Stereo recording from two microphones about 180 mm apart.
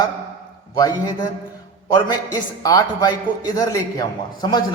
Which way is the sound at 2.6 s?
20° left (ahead or behind).